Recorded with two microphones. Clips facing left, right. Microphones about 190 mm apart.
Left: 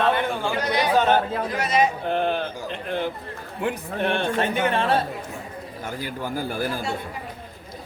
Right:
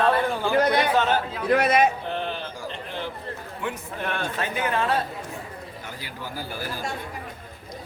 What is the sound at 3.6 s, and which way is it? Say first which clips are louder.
Speech: left 7 dB; 25° left (ahead or behind).